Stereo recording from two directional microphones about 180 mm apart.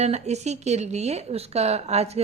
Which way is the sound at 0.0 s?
35° right (ahead or behind).